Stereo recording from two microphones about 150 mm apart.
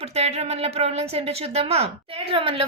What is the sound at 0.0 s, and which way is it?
A woman's voice, 45° right (ahead or behind).